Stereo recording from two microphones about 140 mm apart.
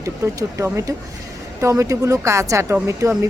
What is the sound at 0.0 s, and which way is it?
Speech, 20° right (ahead or behind).